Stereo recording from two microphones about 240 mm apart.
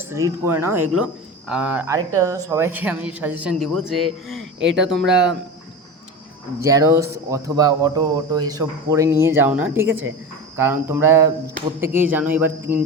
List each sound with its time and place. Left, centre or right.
0.1 s speech: centre
6.6 s speech: centre
9.8 s speech: right
10.6 s speech: centre